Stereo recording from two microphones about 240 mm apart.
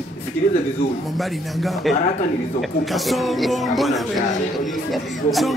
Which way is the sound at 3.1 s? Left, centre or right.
Centre.